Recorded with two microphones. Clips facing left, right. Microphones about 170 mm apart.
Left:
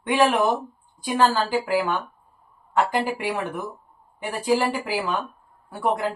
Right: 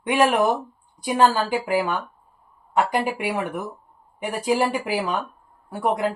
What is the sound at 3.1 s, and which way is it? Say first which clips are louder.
Speech: right 1 dB; 15° right (ahead or behind).